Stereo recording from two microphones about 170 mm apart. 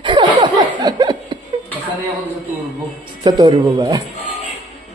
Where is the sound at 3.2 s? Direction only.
20° right (ahead or behind).